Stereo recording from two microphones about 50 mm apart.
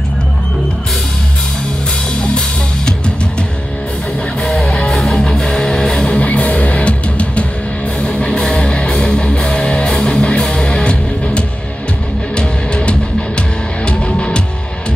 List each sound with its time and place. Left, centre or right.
4.6 s music: centre
4.9 s music: centre
6.1 s music: left